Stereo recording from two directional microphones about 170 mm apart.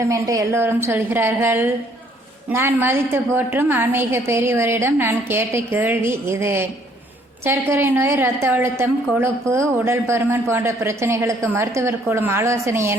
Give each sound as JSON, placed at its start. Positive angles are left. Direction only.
{"t": 0.0, "sound": "a woman's voice", "side_deg": -20}